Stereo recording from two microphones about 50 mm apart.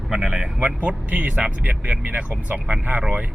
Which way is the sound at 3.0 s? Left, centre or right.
Right.